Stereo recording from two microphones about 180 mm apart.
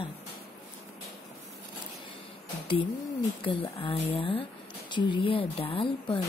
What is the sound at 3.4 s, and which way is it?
Speech, 30° left (ahead or behind).